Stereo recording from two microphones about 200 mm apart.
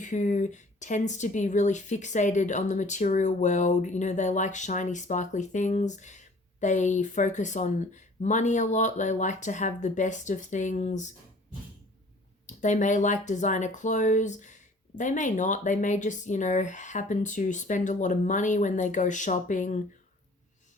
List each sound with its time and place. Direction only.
0.0 s speech: 40° left (ahead or behind)
12.5 s speech: 35° left (ahead or behind)